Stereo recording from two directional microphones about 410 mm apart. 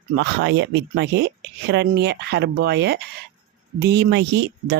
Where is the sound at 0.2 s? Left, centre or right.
Right.